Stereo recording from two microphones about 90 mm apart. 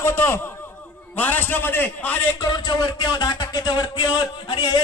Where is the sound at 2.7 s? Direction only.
55° left (ahead or behind).